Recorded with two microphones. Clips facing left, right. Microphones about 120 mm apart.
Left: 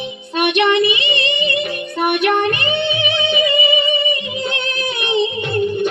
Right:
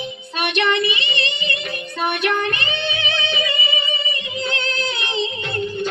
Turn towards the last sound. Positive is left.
turn(degrees=25)  # may be behind; listen again after turning